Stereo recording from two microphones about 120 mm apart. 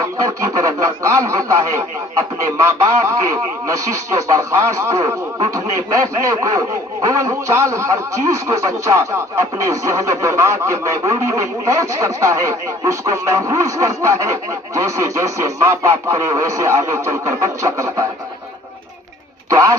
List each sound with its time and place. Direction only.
0.0 s a man's voice: 25° right (ahead or behind)
19.5 s speech: 30° right (ahead or behind)